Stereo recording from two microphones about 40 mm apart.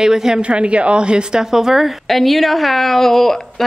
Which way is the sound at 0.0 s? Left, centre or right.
Centre.